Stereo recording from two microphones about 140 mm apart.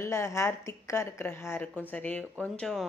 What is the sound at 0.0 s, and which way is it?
A woman's voice, 20° left (ahead or behind).